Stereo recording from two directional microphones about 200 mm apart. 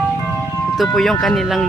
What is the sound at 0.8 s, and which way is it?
Speech, centre (ahead or behind).